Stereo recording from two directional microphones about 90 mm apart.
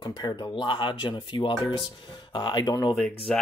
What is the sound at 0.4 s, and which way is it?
Speech, 60° left (ahead or behind).